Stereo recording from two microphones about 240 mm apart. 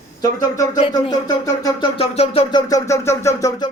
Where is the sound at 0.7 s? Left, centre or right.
Centre.